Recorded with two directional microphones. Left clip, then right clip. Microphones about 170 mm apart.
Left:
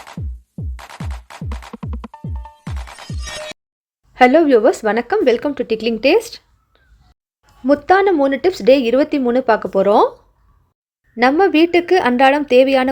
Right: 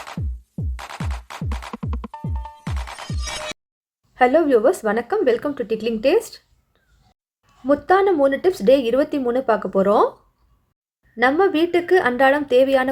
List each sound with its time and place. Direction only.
0.0 s music: centre (ahead or behind)
4.1 s speech: 30° left (ahead or behind)
7.7 s speech: 35° left (ahead or behind)
11.2 s speech: 30° left (ahead or behind)